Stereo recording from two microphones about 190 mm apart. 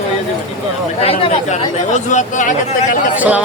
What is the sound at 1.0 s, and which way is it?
Speech, 30° left (ahead or behind).